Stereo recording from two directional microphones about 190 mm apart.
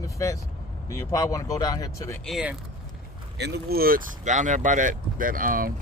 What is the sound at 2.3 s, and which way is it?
Speech, 5° right (ahead or behind).